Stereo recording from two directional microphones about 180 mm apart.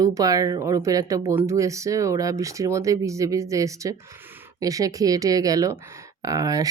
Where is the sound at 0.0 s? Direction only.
20° right (ahead or behind).